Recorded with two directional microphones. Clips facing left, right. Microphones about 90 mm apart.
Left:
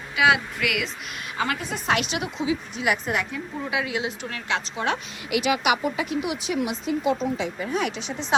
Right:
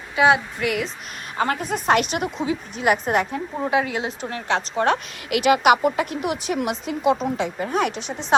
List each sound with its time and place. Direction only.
0.2 s a woman's voice: 30° right (ahead or behind); by 8.4 s 50° right (ahead or behind)